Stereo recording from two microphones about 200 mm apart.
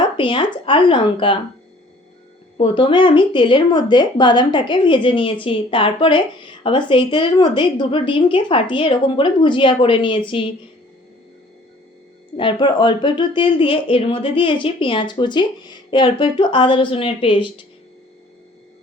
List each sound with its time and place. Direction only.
0.2 s speech: 25° left (ahead or behind)
2.6 s speech: 25° left (ahead or behind)
12.4 s speech: 25° left (ahead or behind)